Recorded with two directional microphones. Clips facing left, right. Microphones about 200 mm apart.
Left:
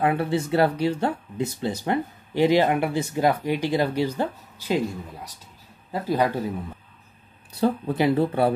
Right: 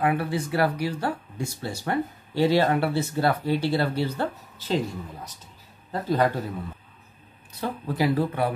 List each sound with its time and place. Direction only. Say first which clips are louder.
0.0 s a man's voice: left 2 dB; 25° left (ahead or behind); by 6.2 s 10° left (ahead or behind)
7.6 s speech: left 4 dB; 25° left (ahead or behind)